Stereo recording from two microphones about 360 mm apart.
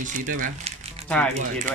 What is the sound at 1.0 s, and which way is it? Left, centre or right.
Speech, centre.